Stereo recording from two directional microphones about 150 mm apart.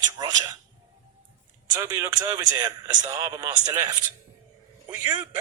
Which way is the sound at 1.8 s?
20° right (ahead or behind).